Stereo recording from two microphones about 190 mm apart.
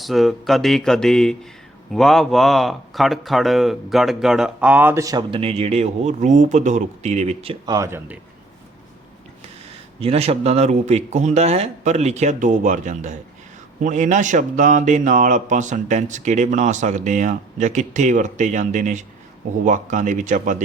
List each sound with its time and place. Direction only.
0.0 s speech: centre (ahead or behind); by 7.5 s 35° right (ahead or behind)
7.6 s speech: 20° right (ahead or behind)
10.0 s a man's voice: 30° right (ahead or behind)